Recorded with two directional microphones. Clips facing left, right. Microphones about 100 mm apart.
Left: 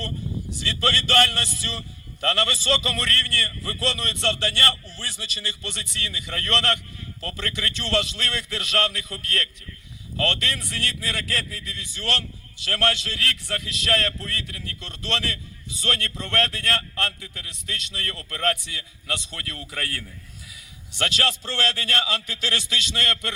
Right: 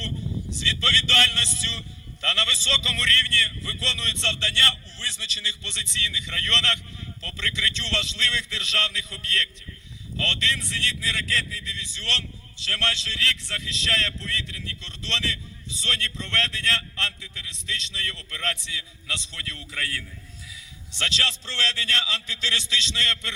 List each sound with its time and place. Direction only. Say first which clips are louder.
0.6 s a man's voice: left 3 dB; 50° left (ahead or behind)